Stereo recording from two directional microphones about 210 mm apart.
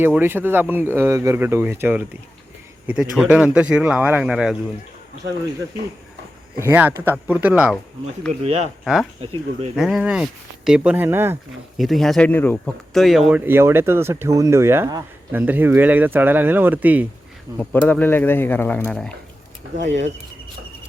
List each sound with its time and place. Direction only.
0.0 s a man's voice: 10° right (ahead or behind)
6.6 s speech: 10° right (ahead or behind)
8.8 s speech: centre (ahead or behind)
9.2 s speech: 25° right (ahead or behind)
9.7 s a man's voice: centre (ahead or behind)
11.8 s speech: centre (ahead or behind)
17.6 s speech: 5° left (ahead or behind)
19.7 s speech: 60° right (ahead or behind)